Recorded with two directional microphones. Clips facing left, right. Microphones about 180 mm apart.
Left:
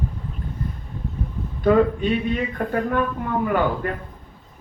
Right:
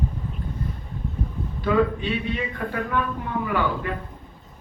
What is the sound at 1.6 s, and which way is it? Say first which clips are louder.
Speech: left 4 dB; 45° left (ahead or behind).